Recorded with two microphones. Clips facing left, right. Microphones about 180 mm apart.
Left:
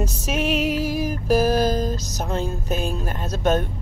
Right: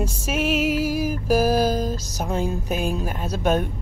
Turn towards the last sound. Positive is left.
turn(degrees=-10)  # may be behind; listen again after turning